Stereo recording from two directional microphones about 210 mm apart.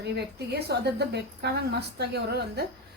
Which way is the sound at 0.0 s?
50° right (ahead or behind).